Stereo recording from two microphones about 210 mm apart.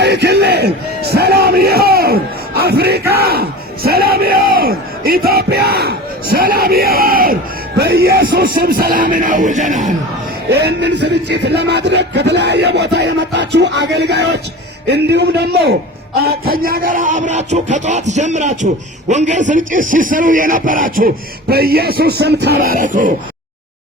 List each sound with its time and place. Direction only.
0.0 s a sound: 50° right (ahead or behind)
2.6 s music: 50° right (ahead or behind)
3.1 s a sound: 50° right (ahead or behind)
3.8 s crowd: 45° right (ahead or behind)
7.8 s music: 45° right (ahead or behind)
8.4 s speech: 45° right (ahead or behind)
10.5 s speech: 55° right (ahead or behind)